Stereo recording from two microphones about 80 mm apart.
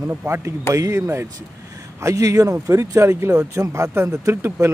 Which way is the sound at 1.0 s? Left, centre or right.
Right.